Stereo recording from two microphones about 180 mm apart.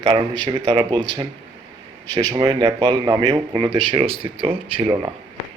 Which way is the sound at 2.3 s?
25° right (ahead or behind).